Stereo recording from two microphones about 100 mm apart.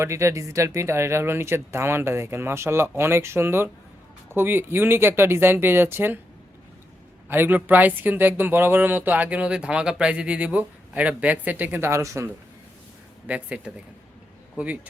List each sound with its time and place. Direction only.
0.0 s speech: 30° right (ahead or behind)
7.3 s speech: 20° right (ahead or behind)
13.2 s speech: 15° right (ahead or behind)